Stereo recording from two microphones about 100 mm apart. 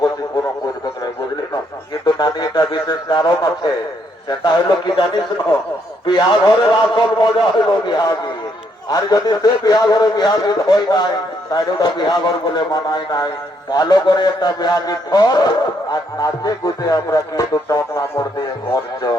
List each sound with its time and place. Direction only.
1.9 s a man's voice: 40° left (ahead or behind)